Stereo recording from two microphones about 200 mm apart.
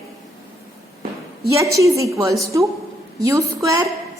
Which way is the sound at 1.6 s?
15° right (ahead or behind).